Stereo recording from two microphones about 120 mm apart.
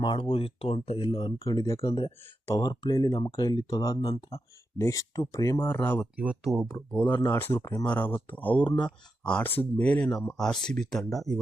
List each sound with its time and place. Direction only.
0.0 s speech: 45° left (ahead or behind)
1.5 s speech: 30° left (ahead or behind)
1.9 s speech: 40° left (ahead or behind)
4.1 s speech: 55° left (ahead or behind)
4.8 s speech: 25° left (ahead or behind)
5.6 s speech: 15° left (ahead or behind)
6.1 s speech: 5° right (ahead or behind)
7.3 s speech: 15° left (ahead or behind)
8.6 s speech: 40° left (ahead or behind)
9.2 s speech: 10° left (ahead or behind)